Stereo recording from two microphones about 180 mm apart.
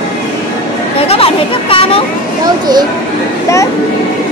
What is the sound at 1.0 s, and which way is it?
Chatter, 30° left (ahead or behind).